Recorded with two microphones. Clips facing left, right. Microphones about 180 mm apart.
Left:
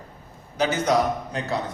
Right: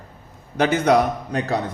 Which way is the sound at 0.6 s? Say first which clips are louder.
Right 5 dB; 60° right (ahead or behind).